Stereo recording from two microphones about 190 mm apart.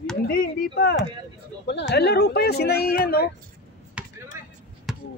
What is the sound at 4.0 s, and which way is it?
Chop, 5° right (ahead or behind).